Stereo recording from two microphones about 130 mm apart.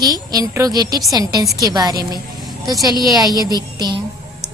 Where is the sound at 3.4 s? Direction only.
30° right (ahead or behind).